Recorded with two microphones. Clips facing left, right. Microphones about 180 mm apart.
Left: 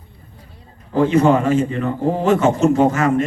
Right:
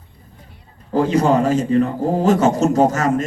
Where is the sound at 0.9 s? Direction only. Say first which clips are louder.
Left 1 dB; 40° right (ahead or behind).